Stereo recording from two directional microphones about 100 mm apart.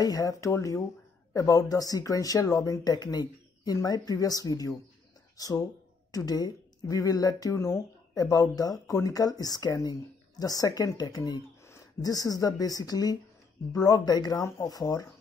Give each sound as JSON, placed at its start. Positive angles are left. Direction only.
{"t": 0.0, "sound": "speech", "side_deg": 40}